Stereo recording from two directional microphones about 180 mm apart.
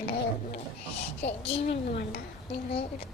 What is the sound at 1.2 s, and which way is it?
Speech, 35° left (ahead or behind).